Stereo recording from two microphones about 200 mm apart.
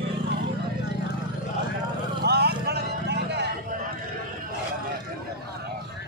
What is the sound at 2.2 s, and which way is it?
Vehicle, 55° right (ahead or behind).